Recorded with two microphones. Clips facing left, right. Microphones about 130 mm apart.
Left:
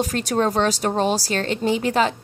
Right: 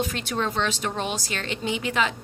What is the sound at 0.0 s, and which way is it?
A woman's voice, 40° left (ahead or behind).